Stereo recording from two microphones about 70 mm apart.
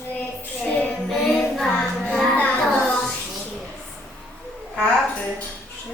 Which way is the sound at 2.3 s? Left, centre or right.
Left.